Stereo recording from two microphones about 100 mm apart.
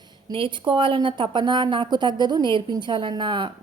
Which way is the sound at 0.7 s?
55° right (ahead or behind).